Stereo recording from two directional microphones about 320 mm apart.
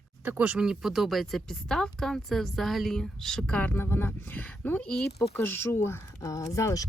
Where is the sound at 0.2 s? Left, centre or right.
Centre.